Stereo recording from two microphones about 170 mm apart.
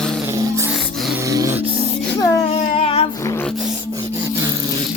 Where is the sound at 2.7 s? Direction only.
35° left (ahead or behind).